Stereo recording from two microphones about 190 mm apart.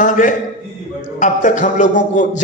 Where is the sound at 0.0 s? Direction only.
45° left (ahead or behind).